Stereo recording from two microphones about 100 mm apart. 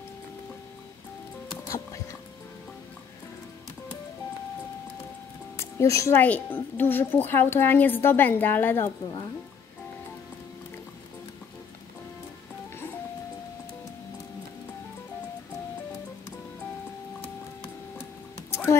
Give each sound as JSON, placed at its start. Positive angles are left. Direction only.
{"t": 5.6, "sound": "speech", "side_deg": 30}
{"t": 6.1, "sound": "speech", "side_deg": 15}
{"t": 18.5, "sound": "music", "side_deg": 25}